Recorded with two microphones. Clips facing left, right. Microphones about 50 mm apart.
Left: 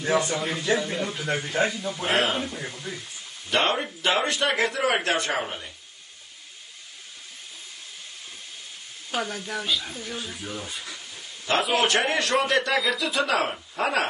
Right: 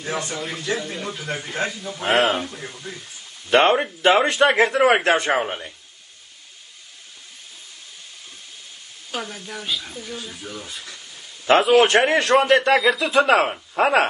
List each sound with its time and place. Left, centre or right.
0.0 s speech: centre
3.4 s a man's voice: right
9.1 s speech: centre
11.7 s a man's voice: right